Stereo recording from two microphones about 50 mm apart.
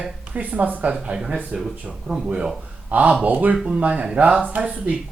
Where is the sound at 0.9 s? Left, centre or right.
Centre.